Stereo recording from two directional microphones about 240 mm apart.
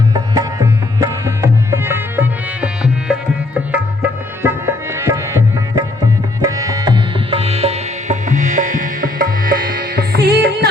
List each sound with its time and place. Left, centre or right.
0.1 s music: centre
4.4 s tabla: centre
6.4 s music: centre; by 10.7 s right